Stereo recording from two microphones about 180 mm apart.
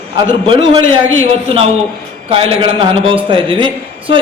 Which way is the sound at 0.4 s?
30° right (ahead or behind).